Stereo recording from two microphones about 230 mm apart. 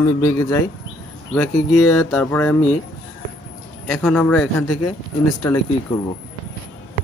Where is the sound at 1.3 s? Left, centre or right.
Centre.